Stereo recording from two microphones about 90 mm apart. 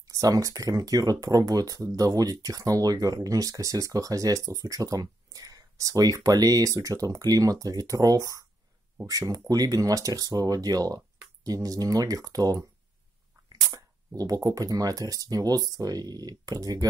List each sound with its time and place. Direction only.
0.1 s speech: 40° right (ahead or behind)